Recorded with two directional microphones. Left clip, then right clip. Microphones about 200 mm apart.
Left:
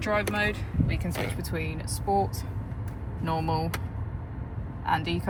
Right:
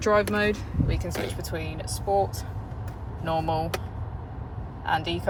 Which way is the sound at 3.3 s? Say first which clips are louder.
Right 3 dB; 40° right (ahead or behind).